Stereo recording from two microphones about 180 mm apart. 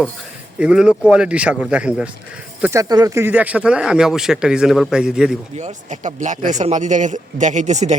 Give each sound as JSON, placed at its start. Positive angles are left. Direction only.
{"t": 0.6, "sound": "speech", "side_deg": -5}
{"t": 5.5, "sound": "a man's voice", "side_deg": -40}